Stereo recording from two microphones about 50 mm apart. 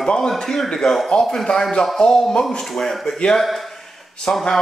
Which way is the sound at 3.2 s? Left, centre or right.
Centre.